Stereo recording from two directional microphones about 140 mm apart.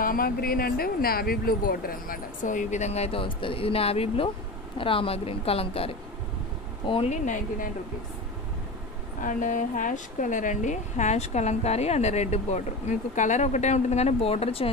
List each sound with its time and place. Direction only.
0.0 s speech: 90° left; by 5.9 s 40° left (ahead or behind)
7.1 s speech: 65° left (ahead or behind)
9.2 s a woman's voice: 65° left (ahead or behind); by 14.7 s 45° left (ahead or behind)